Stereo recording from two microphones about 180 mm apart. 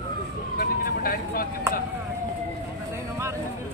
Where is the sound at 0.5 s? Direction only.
50° left (ahead or behind).